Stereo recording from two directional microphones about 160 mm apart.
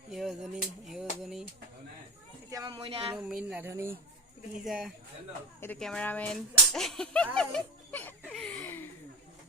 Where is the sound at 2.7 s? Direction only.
35° right (ahead or behind).